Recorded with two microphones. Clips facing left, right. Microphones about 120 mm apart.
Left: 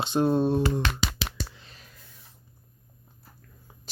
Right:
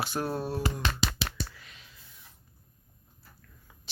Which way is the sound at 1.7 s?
40° left (ahead or behind).